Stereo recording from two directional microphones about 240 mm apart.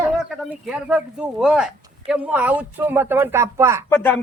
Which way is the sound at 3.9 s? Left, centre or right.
Centre.